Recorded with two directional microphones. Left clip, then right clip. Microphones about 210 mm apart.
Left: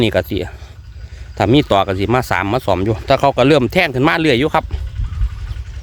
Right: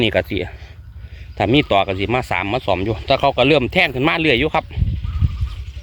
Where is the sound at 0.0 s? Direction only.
20° left (ahead or behind).